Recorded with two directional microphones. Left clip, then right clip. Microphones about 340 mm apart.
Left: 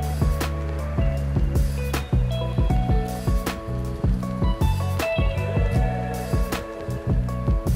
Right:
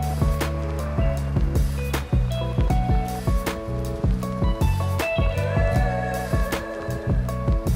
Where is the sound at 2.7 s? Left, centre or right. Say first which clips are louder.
Right 2 dB; centre.